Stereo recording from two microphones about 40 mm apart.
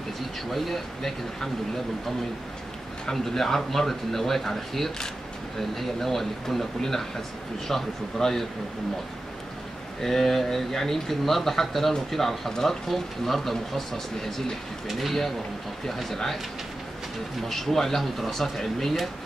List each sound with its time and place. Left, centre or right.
0.5 s speech: centre
3.1 s speech: centre
10.0 s speech: centre
17.4 s speech: centre